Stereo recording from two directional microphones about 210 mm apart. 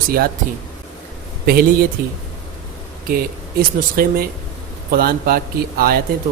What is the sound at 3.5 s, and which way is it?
Speech, 45° right (ahead or behind).